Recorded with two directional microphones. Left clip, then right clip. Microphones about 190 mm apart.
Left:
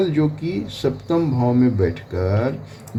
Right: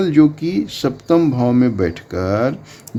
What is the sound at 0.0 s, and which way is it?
A man's voice, 55° right (ahead or behind).